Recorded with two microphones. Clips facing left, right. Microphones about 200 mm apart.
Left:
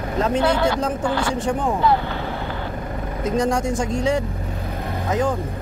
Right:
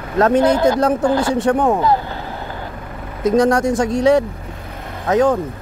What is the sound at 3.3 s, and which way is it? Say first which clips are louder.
Speech: right 6 dB; 70° right (ahead or behind).